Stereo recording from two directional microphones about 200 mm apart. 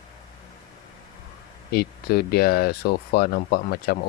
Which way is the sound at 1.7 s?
50° left (ahead or behind).